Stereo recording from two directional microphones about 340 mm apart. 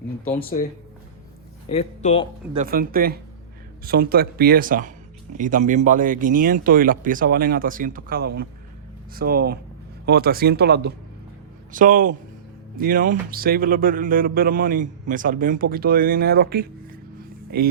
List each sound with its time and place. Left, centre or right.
1.7 s speech: centre
2.5 s a man's voice: right